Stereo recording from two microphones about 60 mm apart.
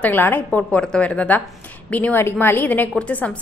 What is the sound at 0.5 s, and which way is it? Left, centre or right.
Speech, left.